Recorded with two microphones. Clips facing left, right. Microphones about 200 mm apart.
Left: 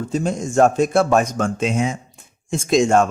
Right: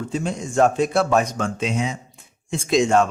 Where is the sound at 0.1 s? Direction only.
45° left (ahead or behind).